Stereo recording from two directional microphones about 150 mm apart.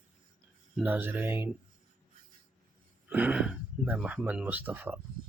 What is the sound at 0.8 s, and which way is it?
Speech, 10° right (ahead or behind).